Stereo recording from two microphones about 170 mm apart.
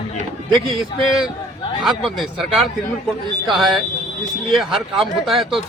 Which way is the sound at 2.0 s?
Centre (ahead or behind).